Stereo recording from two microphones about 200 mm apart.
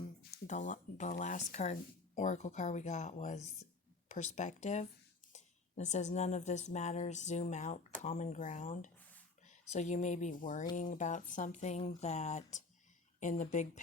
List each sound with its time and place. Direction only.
0.4 s speech: 35° left (ahead or behind)